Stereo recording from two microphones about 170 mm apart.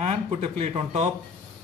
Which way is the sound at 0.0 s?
40° right (ahead or behind).